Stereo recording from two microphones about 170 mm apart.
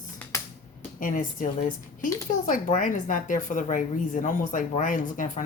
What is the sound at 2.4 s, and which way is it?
A woman's voice, 50° left (ahead or behind).